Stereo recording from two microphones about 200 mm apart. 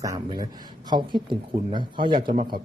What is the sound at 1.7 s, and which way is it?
Speech, 25° right (ahead or behind).